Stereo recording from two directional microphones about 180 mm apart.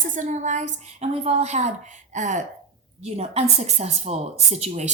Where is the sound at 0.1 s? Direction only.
40° right (ahead or behind).